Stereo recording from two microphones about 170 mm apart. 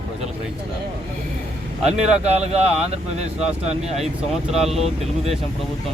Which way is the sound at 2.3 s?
40° right (ahead or behind).